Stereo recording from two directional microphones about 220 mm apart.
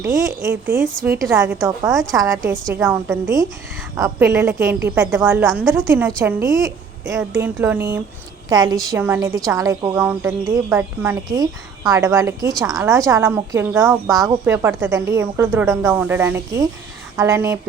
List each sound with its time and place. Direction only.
0.0 s a woman's voice: 15° right (ahead or behind)
5.5 s a woman's voice: centre (ahead or behind)
6.1 s a woman's voice: 15° right (ahead or behind)
12.5 s a woman's voice: centre (ahead or behind)
13.1 s a woman's voice: 15° right (ahead or behind)